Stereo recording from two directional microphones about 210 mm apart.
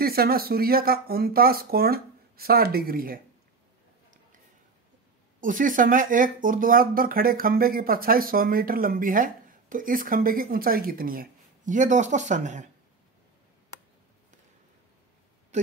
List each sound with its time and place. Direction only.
0.0 s speech: 45° right (ahead or behind)
5.4 s speech: 40° right (ahead or behind)
15.5 s speech: 35° right (ahead or behind)